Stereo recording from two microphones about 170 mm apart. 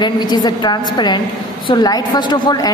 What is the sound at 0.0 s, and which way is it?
A woman's voice, 25° left (ahead or behind).